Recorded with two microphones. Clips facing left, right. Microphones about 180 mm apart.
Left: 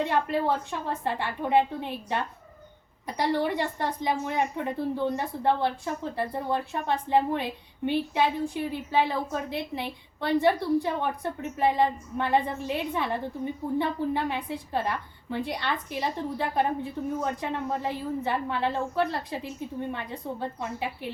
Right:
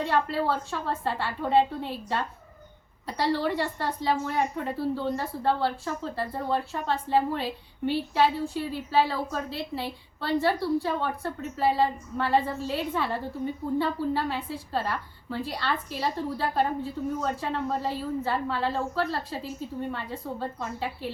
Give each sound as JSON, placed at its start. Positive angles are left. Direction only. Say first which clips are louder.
{"t": 0.0, "sound": "a woman's voice", "louder": "even", "side_deg": 20}
{"t": 3.2, "sound": "a woman's voice", "louder": "even", "side_deg": 15}